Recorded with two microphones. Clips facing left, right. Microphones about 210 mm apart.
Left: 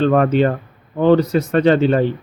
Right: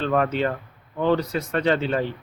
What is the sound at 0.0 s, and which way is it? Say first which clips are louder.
Speech: left 8 dB; 50° left (ahead or behind).